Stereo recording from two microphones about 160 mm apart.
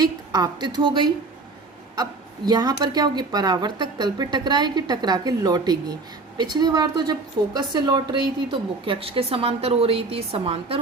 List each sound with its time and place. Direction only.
0.0 s speech: 25° right (ahead or behind)
2.5 s a woman's voice: 25° right (ahead or behind)